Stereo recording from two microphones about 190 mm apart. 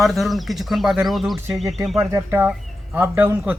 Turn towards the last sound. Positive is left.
turn(degrees=-10)  # may be behind; listen again after turning